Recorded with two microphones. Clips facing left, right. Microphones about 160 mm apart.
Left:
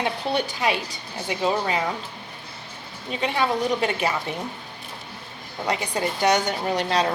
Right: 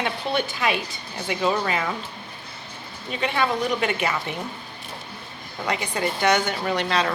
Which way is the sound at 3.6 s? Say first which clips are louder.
Left 1 dB; 35° left (ahead or behind).